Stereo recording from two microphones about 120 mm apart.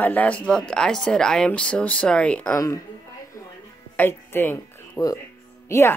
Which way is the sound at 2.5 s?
25° left (ahead or behind).